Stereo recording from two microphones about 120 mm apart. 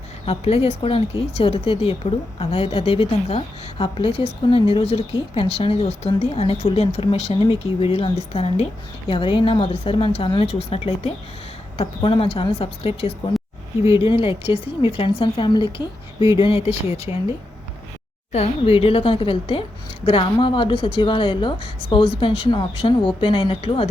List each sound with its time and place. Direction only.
0.3 s a woman's voice: 60° left (ahead or behind)
9.0 s a woman's voice: 45° left (ahead or behind)
16.4 s speech: 60° left (ahead or behind)
18.3 s a woman's voice: 60° left (ahead or behind)